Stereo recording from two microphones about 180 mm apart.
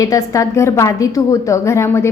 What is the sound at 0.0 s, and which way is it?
A woman's voice, 20° left (ahead or behind).